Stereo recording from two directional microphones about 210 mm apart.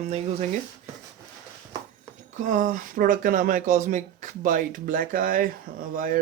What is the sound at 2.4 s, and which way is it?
Speech, 40° right (ahead or behind).